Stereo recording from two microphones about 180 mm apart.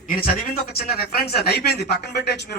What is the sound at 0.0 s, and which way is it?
A man's voice, 55° left (ahead or behind).